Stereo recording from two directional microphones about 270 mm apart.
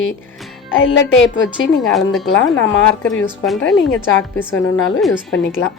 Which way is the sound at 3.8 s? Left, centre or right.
Left.